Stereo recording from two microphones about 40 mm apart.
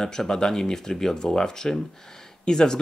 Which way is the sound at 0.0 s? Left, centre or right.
Centre.